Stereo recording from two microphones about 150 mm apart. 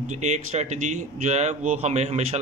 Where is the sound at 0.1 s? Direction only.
50° right (ahead or behind).